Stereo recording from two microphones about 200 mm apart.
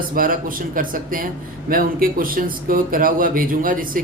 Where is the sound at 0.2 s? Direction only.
45° right (ahead or behind).